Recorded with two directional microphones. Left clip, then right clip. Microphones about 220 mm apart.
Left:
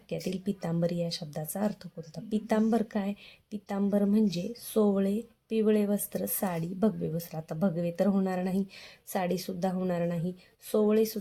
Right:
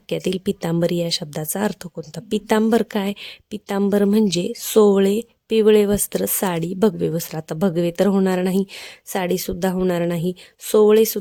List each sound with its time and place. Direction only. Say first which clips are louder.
0.1 s a woman's voice: right 12 dB; 40° right (ahead or behind)